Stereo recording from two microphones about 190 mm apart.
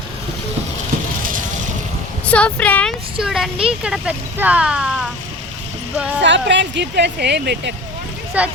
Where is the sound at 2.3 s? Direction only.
5° left (ahead or behind).